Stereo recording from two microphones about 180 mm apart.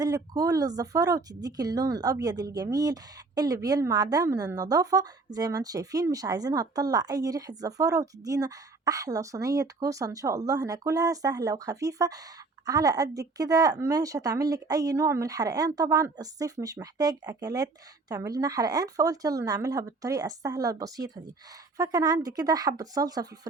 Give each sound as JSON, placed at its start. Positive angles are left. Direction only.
{"t": 0.0, "sound": "a woman's voice", "side_deg": -20}